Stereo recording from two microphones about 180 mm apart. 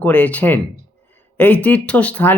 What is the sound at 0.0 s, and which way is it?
Speech, 10° left (ahead or behind).